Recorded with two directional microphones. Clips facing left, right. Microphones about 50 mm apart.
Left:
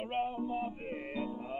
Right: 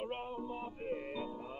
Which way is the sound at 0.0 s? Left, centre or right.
Left.